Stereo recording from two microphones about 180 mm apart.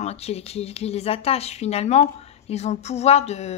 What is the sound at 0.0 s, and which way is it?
Speech, 35° left (ahead or behind).